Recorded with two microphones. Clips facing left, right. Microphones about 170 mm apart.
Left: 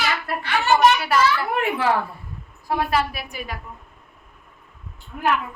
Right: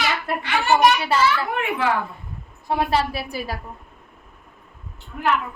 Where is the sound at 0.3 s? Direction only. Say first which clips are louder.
Even; 15° right (ahead or behind).